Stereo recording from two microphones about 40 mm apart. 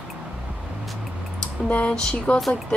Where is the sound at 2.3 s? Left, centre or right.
Left.